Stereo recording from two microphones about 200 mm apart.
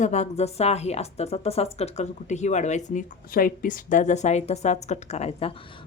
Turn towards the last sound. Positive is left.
turn(degrees=30)  # may be behind; listen again after turning